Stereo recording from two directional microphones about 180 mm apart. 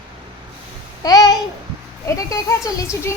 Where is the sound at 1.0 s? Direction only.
20° left (ahead or behind).